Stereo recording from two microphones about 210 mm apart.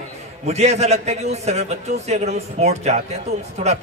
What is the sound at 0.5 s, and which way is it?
A man's voice, 30° right (ahead or behind).